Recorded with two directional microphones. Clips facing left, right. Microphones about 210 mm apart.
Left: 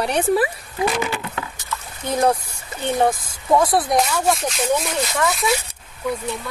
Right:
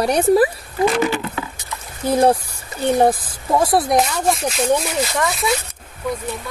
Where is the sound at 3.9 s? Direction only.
Centre (ahead or behind).